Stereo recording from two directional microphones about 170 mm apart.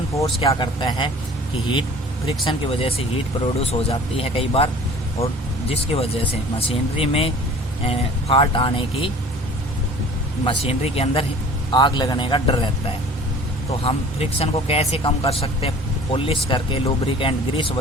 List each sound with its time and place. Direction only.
0.3 s a man's voice: 30° left (ahead or behind)
2.2 s speech: 35° left (ahead or behind)
10.4 s a man's voice: 35° left (ahead or behind)
13.8 s speech: 35° left (ahead or behind)